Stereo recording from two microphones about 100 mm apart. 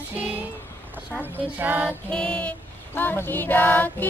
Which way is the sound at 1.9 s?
10° left (ahead or behind).